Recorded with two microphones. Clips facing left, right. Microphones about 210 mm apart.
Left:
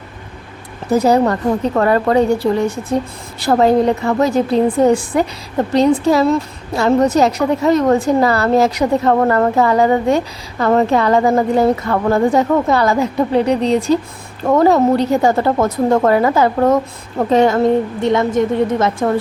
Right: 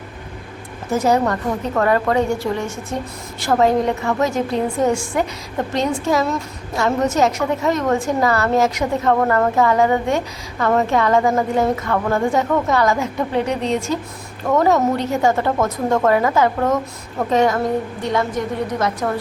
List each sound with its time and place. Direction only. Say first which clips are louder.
0.9 s a woman's voice: left 4 dB; 35° left (ahead or behind)